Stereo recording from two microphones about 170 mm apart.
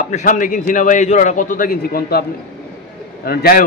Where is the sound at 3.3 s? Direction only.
60° left (ahead or behind).